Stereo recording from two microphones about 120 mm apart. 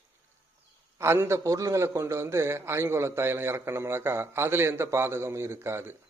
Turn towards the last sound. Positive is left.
turn(degrees=-20)  # may be behind; listen again after turning